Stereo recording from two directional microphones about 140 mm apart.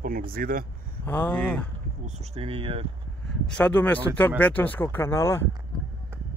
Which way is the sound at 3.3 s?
5° left (ahead or behind).